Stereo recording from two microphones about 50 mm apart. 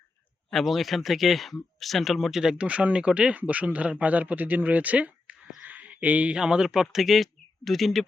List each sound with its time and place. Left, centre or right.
0.6 s speech: centre
2.4 s speech: centre
2.6 s speech: right
5.6 s a sound: right
6.3 s speech: centre